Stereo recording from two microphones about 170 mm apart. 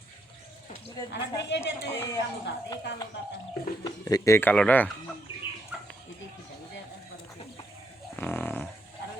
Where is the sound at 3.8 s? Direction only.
20° left (ahead or behind).